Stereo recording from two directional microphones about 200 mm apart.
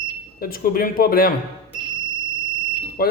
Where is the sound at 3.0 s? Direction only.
50° left (ahead or behind).